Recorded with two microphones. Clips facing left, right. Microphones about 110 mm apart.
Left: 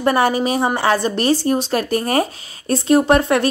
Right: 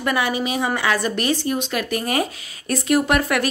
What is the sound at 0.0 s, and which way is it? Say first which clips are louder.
A woman's voice: left 6 dB; 40° left (ahead or behind).